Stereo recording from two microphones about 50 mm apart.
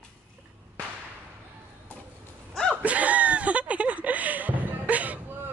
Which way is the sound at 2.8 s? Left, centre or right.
Right.